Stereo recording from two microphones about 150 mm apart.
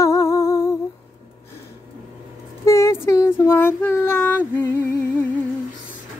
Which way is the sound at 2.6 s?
20° left (ahead or behind).